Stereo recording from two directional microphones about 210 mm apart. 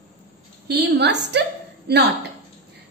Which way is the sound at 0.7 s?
50° right (ahead or behind).